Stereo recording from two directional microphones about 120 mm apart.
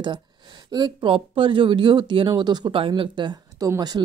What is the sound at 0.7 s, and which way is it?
Speech, 35° right (ahead or behind).